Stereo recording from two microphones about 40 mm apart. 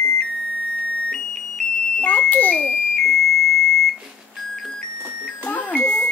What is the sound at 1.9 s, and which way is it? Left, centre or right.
Smoke detector, left.